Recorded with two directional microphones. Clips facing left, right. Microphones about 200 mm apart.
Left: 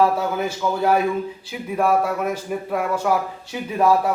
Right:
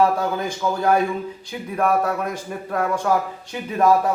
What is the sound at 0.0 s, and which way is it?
A man's voice, 5° left (ahead or behind).